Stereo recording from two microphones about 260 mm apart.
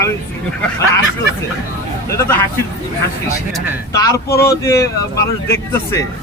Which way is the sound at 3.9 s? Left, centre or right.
Centre.